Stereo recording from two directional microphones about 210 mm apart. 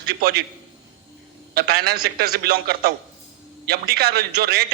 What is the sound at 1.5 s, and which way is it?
Speech, 50° right (ahead or behind).